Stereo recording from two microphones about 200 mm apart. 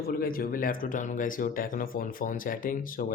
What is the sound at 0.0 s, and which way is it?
Speech, 50° left (ahead or behind).